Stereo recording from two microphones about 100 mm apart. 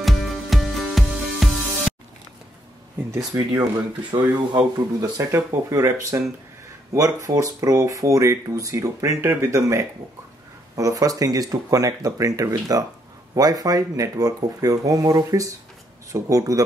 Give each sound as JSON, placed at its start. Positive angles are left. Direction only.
{"t": 0.0, "sound": "music", "side_deg": 0}
{"t": 3.2, "sound": "speech", "side_deg": -35}
{"t": 5.3, "sound": "speech", "side_deg": -30}